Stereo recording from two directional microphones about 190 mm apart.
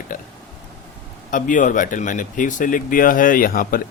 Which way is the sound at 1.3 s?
45° left (ahead or behind).